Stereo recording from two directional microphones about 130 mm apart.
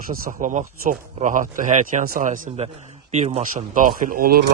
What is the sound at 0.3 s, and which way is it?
Speech, 85° right.